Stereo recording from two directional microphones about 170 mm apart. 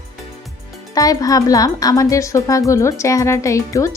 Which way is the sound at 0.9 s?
20° left (ahead or behind).